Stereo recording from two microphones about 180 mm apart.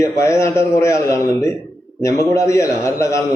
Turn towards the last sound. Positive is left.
turn(degrees=15)  # may be behind; listen again after turning